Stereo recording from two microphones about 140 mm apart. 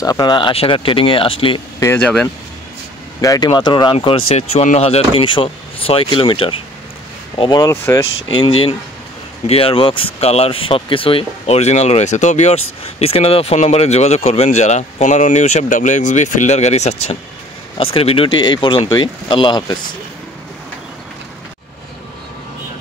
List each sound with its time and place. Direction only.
0.0 s speech: 25° left (ahead or behind)
2.0 s speech: 10° left (ahead or behind)
3.2 s speech: 25° left (ahead or behind)
7.7 s speech: 20° left (ahead or behind)
9.5 s speech: 40° left (ahead or behind)
17.7 s speech: 40° left (ahead or behind)